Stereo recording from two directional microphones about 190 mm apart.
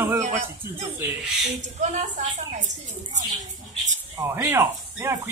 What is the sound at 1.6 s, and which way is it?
A woman's voice, 40° right (ahead or behind).